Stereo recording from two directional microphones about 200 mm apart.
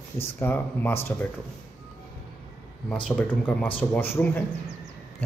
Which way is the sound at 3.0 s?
5° left (ahead or behind).